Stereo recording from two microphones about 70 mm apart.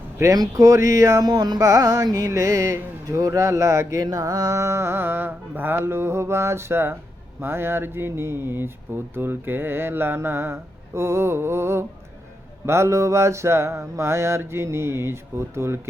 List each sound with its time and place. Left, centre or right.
0.3 s music: right
3.1 s speech: right